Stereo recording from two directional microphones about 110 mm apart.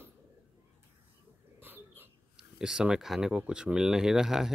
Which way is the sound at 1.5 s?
20° right (ahead or behind).